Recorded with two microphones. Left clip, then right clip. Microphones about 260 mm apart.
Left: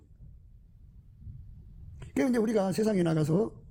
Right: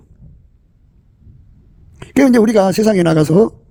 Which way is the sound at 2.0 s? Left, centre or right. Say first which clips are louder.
Right 17 dB; right.